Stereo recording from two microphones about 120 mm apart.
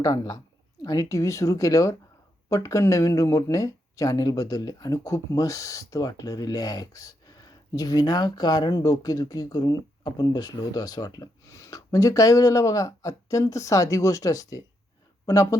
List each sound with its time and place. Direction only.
0.0 s speech: 30° left (ahead or behind)